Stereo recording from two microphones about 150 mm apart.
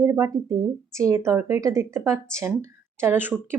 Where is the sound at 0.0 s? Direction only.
20° right (ahead or behind).